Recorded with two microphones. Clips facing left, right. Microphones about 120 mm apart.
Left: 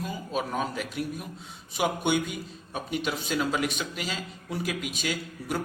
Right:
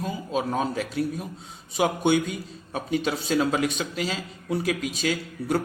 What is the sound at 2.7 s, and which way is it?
A man's voice, 30° right (ahead or behind).